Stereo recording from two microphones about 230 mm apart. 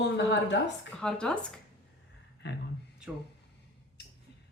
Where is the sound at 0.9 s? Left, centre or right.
Centre.